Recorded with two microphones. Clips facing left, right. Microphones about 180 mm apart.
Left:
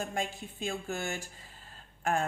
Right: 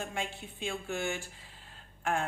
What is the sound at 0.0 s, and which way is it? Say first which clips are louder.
A woman's voice: left 3 dB; 40° left (ahead or behind).